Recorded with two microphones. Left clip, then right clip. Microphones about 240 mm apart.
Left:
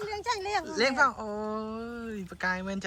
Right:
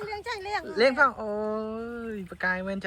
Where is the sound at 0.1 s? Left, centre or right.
Left.